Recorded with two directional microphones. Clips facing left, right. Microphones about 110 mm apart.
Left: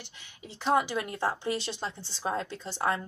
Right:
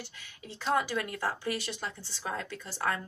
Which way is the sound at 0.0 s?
20° left (ahead or behind).